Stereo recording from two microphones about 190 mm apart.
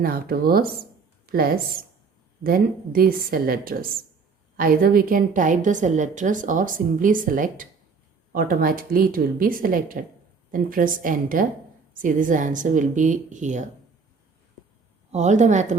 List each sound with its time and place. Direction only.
0.0 s a woman's voice: 50° right (ahead or behind)
15.1 s a woman's voice: 40° right (ahead or behind)